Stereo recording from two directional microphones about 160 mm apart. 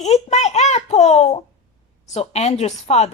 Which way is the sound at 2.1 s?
45° left (ahead or behind).